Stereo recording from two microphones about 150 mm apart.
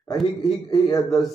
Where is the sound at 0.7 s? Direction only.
40° left (ahead or behind).